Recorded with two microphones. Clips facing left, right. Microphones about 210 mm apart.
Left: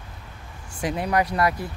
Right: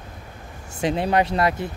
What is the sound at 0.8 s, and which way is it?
Speech, 25° right (ahead or behind).